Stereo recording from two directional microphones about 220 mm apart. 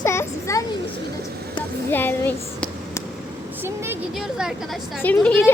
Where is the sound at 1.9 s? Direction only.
10° left (ahead or behind).